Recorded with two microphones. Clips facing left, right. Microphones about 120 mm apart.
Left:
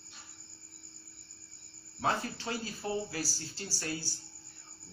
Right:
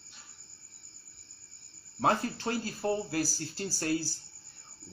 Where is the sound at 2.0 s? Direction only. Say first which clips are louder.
Right 5 dB; 40° right (ahead or behind).